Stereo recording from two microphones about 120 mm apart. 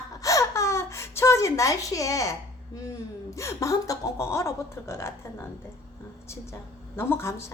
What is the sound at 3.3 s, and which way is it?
A woman's voice, 25° left (ahead or behind).